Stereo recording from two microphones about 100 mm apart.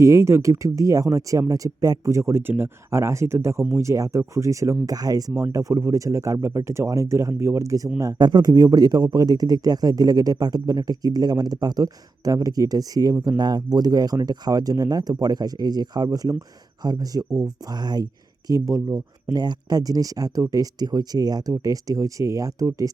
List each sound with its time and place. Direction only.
0.0 s speech: 30° right (ahead or behind)
7.9 s speech: 40° right (ahead or behind)